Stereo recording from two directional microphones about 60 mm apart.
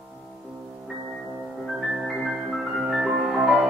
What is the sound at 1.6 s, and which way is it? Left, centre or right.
Music, centre.